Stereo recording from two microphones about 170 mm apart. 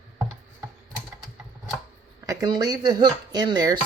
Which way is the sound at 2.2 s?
20° right (ahead or behind).